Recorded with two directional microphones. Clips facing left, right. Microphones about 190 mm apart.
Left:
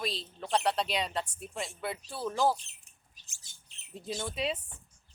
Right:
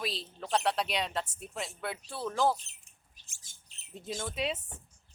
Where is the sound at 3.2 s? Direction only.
50° right (ahead or behind).